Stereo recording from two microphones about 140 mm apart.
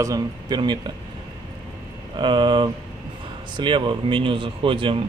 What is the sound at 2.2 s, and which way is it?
A man's voice, 35° right (ahead or behind).